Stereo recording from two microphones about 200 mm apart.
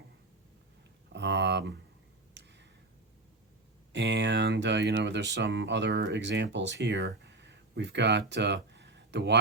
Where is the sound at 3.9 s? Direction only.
60° right (ahead or behind).